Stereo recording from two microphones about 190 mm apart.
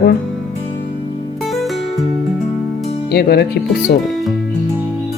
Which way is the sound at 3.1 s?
55° left (ahead or behind).